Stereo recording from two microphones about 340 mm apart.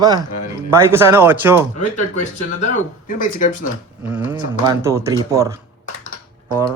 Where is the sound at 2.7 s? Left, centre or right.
Left.